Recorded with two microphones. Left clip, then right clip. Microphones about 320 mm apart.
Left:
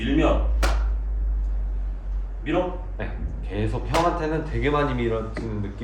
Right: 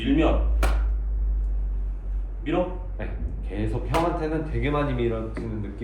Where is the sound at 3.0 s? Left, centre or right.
Left.